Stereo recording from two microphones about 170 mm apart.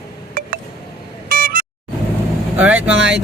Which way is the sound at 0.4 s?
60° right (ahead or behind).